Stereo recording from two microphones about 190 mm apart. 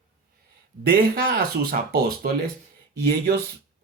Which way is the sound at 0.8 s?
50° right (ahead or behind).